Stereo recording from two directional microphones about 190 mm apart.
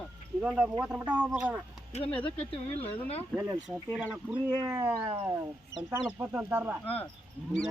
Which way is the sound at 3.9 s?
5° right (ahead or behind).